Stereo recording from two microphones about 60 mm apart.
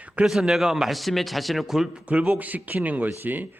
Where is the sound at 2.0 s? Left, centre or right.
Right.